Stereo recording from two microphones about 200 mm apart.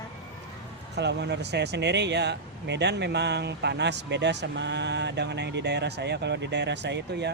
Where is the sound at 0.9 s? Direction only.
60° right (ahead or behind).